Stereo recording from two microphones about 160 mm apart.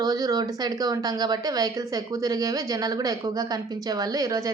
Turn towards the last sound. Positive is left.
turn(degrees=-20)  # may be behind; listen again after turning